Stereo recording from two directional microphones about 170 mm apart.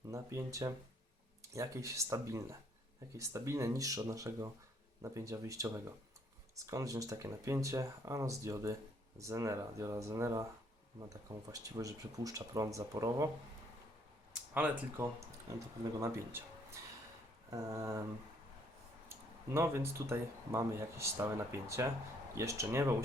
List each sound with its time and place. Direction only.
0.1 s speech: 20° right (ahead or behind)
14.5 s speech: 10° right (ahead or behind)
17.5 s speech: 20° right (ahead or behind)
19.5 s speech: 15° right (ahead or behind)